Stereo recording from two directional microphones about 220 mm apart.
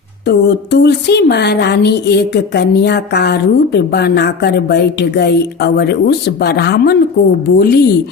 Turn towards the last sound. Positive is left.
turn(degrees=45)  # may be behind; listen again after turning